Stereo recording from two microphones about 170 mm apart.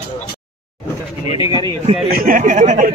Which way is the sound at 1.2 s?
30° left (ahead or behind).